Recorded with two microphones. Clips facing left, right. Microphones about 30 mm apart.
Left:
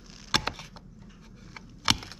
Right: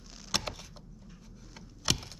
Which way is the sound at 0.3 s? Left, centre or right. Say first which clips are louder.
Left 6 dB; left.